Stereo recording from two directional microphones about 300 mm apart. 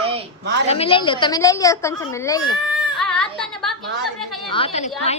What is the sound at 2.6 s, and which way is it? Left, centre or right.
Female singing, centre.